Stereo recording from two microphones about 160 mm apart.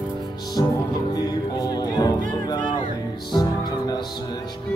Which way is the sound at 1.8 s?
20° left (ahead or behind).